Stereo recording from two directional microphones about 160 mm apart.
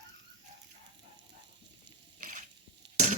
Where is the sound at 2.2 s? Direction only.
55° right (ahead or behind).